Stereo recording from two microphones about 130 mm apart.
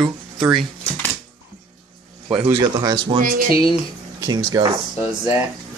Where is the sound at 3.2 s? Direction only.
90° right.